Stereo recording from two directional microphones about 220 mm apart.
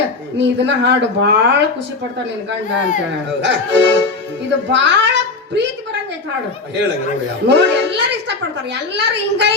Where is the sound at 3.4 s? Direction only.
55° right (ahead or behind).